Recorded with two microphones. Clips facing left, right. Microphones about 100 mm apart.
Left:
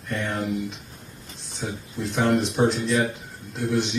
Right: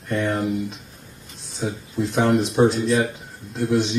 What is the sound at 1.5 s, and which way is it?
Speech, centre (ahead or behind).